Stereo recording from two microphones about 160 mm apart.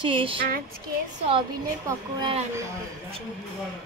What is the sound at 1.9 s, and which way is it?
Speech, 25° right (ahead or behind).